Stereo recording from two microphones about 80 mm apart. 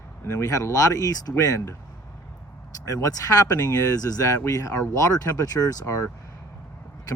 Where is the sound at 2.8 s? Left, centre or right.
Left.